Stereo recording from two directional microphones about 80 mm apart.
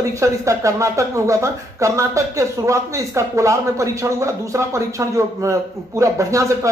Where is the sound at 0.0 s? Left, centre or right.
Right.